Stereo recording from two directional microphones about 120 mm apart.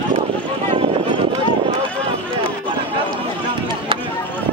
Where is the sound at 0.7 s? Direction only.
45° right (ahead or behind).